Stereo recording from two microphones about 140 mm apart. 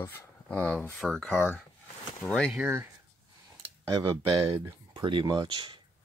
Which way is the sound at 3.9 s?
40° right (ahead or behind).